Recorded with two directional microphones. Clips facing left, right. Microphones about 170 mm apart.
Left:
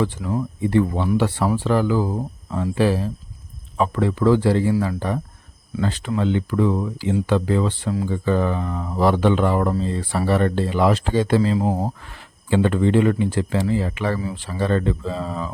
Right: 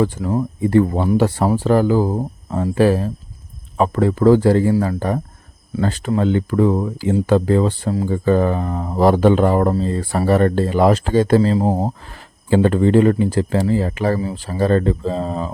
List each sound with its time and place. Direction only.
0.0 s speech: 45° right (ahead or behind)